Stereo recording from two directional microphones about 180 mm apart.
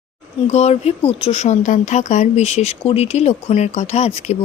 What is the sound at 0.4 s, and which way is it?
Speech, 40° left (ahead or behind).